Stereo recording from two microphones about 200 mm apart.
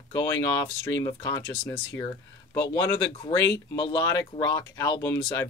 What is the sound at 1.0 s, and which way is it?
Speech, 15° left (ahead or behind).